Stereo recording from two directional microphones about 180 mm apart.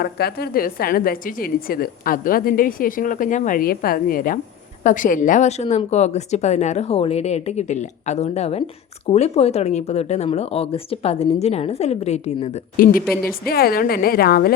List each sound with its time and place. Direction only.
0.0 s a woman's voice: 55° left (ahead or behind); by 12.5 s 35° left (ahead or behind)
12.7 s a woman's voice: 50° left (ahead or behind)